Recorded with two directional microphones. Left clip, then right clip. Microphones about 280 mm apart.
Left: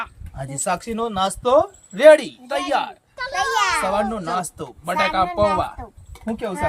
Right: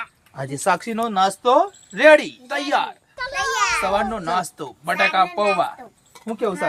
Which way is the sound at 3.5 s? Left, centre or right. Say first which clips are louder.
Left 1 dB; centre.